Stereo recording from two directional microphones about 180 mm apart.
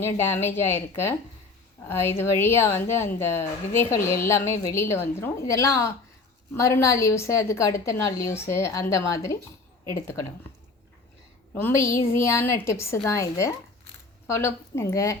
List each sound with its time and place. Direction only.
0.0 s a woman's voice: 15° left (ahead or behind)
11.5 s a woman's voice: 15° left (ahead or behind)